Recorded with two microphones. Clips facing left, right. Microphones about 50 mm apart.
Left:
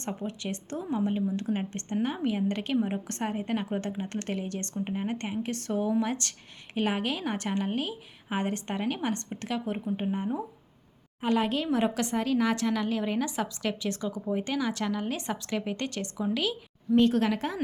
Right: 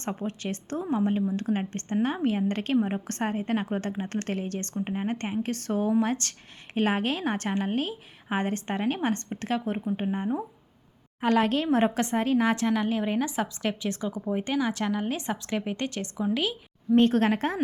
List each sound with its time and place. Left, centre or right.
0.0 s a woman's voice: right
0.9 s a woman's voice: right
3.1 s a woman's voice: right
4.1 s a woman's voice: right
4.7 s a woman's voice: centre
5.6 s a woman's voice: right
9.7 s a woman's voice: centre
11.2 s a woman's voice: right
15.4 s a woman's voice: centre
17.0 s a woman's voice: right